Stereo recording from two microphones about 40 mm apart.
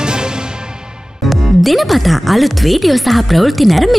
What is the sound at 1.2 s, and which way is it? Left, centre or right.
Speech, centre.